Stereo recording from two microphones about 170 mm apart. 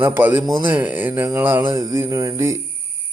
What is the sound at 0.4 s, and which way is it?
Speech, 30° right (ahead or behind).